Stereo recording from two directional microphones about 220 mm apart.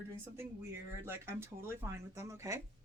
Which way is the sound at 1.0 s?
10° right (ahead or behind).